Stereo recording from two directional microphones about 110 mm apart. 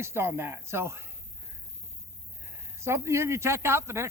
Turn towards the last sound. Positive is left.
turn(degrees=-25)  # may be behind; listen again after turning